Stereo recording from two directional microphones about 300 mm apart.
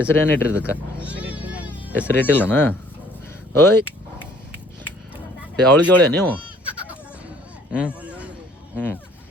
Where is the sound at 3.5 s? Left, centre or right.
Centre.